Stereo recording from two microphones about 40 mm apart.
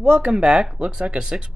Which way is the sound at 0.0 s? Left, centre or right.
Right.